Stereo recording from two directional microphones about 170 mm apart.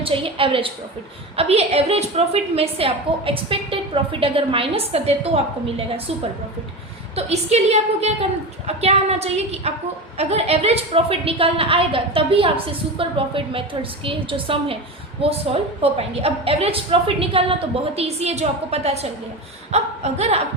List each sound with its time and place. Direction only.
0.0 s a woman's voice: 30° right (ahead or behind)
7.2 s a woman's voice: 40° right (ahead or behind)
15.8 s a woman's voice: 35° right (ahead or behind)